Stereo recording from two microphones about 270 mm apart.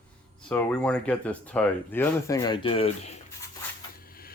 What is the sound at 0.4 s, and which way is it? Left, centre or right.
Speech, centre.